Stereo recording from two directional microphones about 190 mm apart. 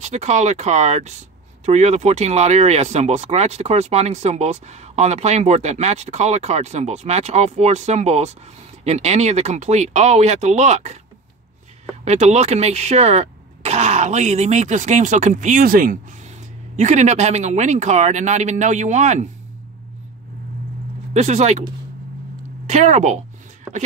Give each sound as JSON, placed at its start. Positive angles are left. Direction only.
{"t": 0.0, "sound": "speech", "side_deg": -35}
{"t": 12.0, "sound": "speech", "side_deg": -35}
{"t": 16.7, "sound": "speech", "side_deg": -35}
{"t": 21.1, "sound": "speech", "side_deg": -35}
{"t": 22.7, "sound": "speech", "side_deg": -40}